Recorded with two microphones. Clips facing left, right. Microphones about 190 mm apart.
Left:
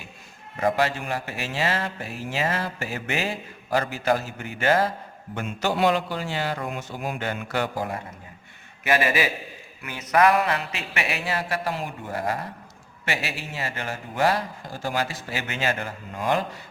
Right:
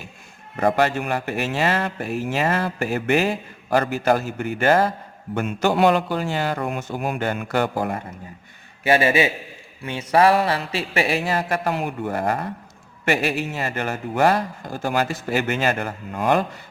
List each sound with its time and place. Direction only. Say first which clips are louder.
0.6 s speech: right 4 dB; 55° right (ahead or behind)
8.8 s a man's voice: right 5 dB; 30° right (ahead or behind)
11.7 s speech: right 6 dB; 65° right (ahead or behind)